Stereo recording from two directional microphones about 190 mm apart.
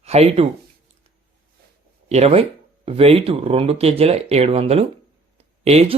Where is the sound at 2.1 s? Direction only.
30° right (ahead or behind).